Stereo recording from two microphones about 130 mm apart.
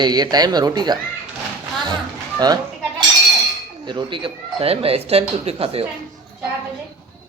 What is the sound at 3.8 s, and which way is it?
Speech, 40° right (ahead or behind).